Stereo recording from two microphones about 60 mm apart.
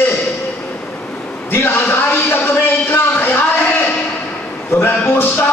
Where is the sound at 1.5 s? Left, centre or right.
Left.